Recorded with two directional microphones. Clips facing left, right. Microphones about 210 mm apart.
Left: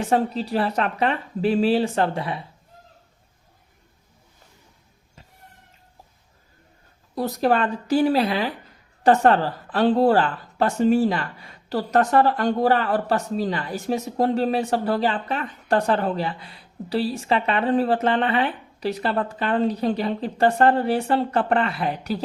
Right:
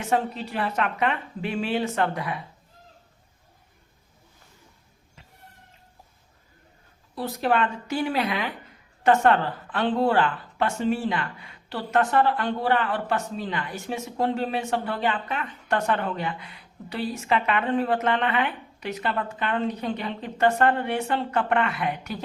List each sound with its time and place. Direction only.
0.0 s a woman's voice: 35° left (ahead or behind)
7.2 s a woman's voice: 40° left (ahead or behind)